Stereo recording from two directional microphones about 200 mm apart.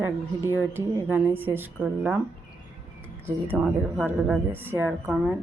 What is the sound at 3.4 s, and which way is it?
A woman's voice, 5° right (ahead or behind).